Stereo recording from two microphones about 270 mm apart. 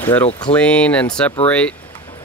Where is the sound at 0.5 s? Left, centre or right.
Centre.